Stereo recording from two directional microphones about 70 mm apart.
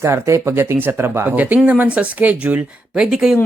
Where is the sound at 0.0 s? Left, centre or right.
Right.